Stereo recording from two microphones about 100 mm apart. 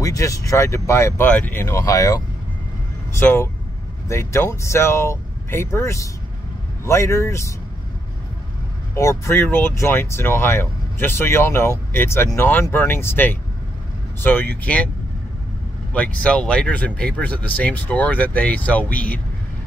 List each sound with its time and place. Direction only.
0.0 s speech: 35° left (ahead or behind)
1.2 s speech: 15° left (ahead or behind)
8.9 s speech: 30° left (ahead or behind)
15.9 s speech: 15° left (ahead or behind)